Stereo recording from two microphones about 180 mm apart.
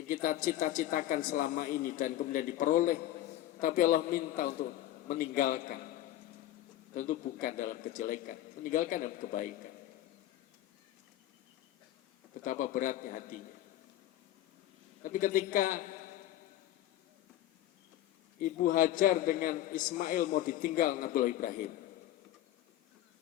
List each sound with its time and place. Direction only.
0.1 s a man's voice: 50° left (ahead or behind)
6.9 s a man's voice: 45° left (ahead or behind)
12.5 s a man's voice: 50° left (ahead or behind)
15.0 s a man's voice: 50° left (ahead or behind)
18.3 s a man's voice: 50° left (ahead or behind)